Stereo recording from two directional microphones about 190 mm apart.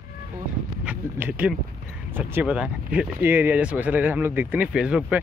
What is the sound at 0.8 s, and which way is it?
Speech, 10° right (ahead or behind).